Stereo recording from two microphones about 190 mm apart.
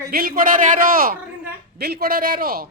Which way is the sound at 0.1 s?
50° right (ahead or behind).